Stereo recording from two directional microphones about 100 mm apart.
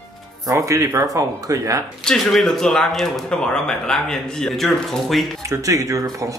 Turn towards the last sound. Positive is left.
turn(degrees=-35)  # may be behind; listen again after turning